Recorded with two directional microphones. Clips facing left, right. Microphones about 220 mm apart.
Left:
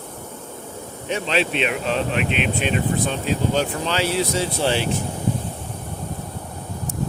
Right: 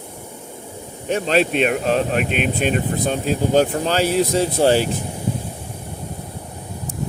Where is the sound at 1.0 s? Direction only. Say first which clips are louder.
Right 5 dB; 45° right (ahead or behind).